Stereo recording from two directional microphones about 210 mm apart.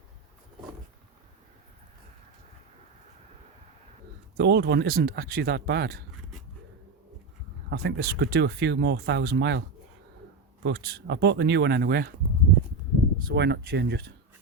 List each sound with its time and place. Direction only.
4.4 s speech: 50° right (ahead or behind)
7.7 s speech: 55° right (ahead or behind)
13.2 s speech: 50° right (ahead or behind)